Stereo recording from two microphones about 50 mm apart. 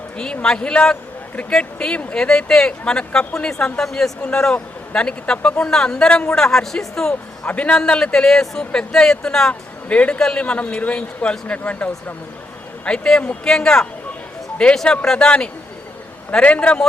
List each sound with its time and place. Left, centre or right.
0.2 s speech: centre
7.1 s speech: left; by 9.5 s centre
9.5 s speech: left
10.2 s speech: centre
10.4 s speech: left
12.8 s speech: centre
16.4 s speech: left